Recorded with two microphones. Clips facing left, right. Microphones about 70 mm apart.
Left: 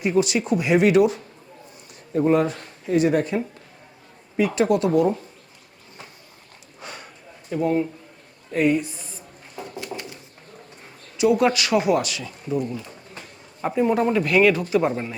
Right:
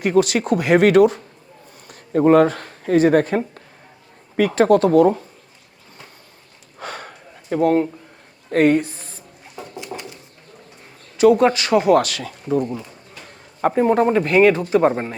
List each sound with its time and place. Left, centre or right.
0.0 s speech: right
6.7 s a sound: right
8.5 s speech: right
9.6 s a sound: centre
11.2 s a man's voice: right
11.9 s a man's voice: right